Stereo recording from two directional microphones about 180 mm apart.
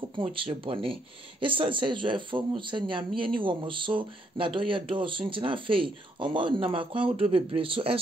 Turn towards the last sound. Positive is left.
turn(degrees=-30)  # may be behind; listen again after turning